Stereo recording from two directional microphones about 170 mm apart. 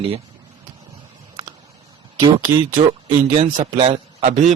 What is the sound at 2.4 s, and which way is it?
Speech, 50° right (ahead or behind).